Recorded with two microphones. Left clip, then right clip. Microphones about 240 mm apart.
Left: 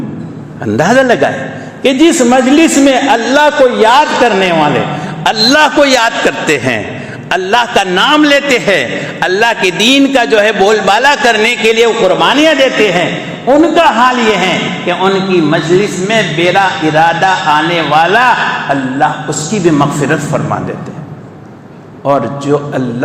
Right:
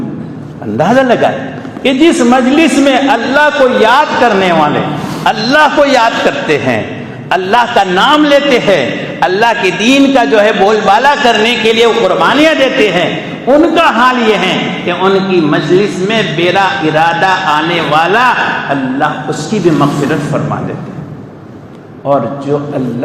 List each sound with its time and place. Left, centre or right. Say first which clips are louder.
0.8 s a man's voice: even; left